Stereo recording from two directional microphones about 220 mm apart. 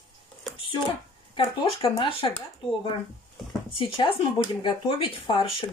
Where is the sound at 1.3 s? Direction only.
25° left (ahead or behind).